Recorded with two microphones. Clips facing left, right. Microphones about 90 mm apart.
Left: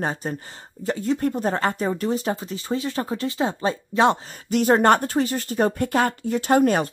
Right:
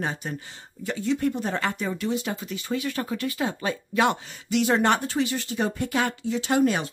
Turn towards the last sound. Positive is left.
turn(degrees=50)  # may be behind; listen again after turning